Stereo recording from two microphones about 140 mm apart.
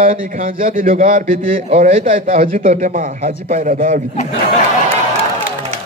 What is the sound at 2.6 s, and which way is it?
A man's voice, 60° right (ahead or behind).